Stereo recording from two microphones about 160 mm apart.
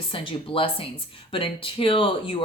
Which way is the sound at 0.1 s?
35° left (ahead or behind).